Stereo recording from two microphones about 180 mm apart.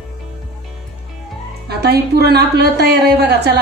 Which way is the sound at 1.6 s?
65° right (ahead or behind).